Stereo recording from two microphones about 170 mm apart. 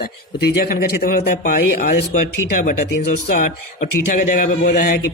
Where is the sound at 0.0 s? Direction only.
65° left (ahead or behind); by 4.7 s 50° left (ahead or behind).